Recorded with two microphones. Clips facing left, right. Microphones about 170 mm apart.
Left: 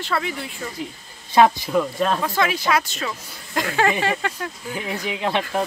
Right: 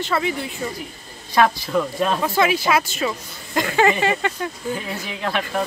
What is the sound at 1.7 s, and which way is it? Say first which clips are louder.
Speech: even; centre (ahead or behind).